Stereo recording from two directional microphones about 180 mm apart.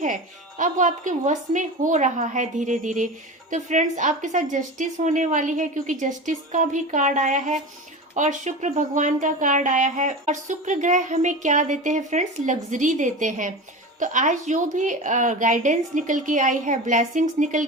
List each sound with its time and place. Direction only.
0.0 s speech: 45° right (ahead or behind)